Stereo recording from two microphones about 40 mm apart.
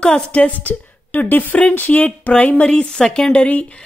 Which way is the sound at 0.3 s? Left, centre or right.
Left.